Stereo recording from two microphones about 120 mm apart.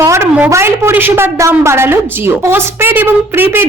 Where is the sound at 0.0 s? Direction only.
25° right (ahead or behind).